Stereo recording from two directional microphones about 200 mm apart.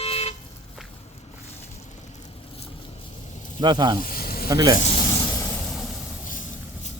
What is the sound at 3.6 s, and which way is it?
Speech, 20° right (ahead or behind).